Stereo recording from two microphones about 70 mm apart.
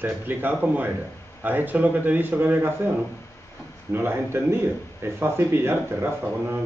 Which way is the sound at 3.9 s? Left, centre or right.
Right.